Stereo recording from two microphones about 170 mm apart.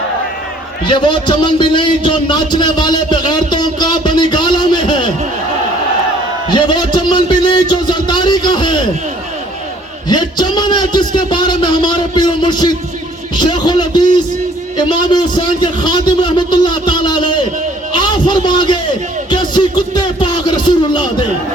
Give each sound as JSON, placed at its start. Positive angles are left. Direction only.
{"t": 0.9, "sound": "a man's voice", "side_deg": 30}
{"t": 6.5, "sound": "a man's voice", "side_deg": 25}
{"t": 10.1, "sound": "a man's voice", "side_deg": 25}
{"t": 19.3, "sound": "music", "side_deg": 25}